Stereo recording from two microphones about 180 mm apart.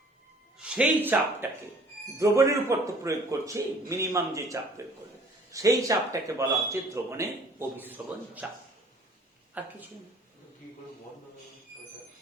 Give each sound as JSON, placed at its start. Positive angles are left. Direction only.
{"t": 0.6, "sound": "a man's voice", "side_deg": -5}